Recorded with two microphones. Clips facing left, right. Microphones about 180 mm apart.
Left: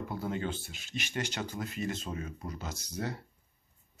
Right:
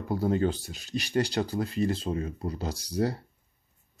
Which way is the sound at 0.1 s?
40° right (ahead or behind).